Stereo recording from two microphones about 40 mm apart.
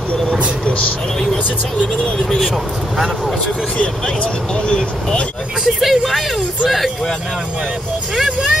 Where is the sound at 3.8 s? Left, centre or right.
Left.